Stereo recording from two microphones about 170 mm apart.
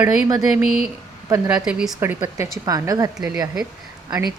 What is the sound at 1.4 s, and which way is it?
A woman's voice, 5° right (ahead or behind).